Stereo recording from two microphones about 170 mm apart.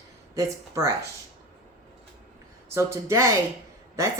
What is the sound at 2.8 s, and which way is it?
Speech, 15° right (ahead or behind).